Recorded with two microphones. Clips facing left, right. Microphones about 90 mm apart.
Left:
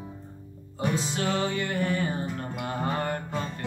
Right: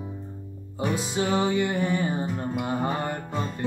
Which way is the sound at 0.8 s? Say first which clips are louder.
Right 2 dB; 10° right (ahead or behind).